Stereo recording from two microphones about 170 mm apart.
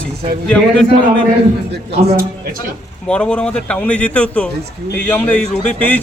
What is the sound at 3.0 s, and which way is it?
Speech, 5° left (ahead or behind).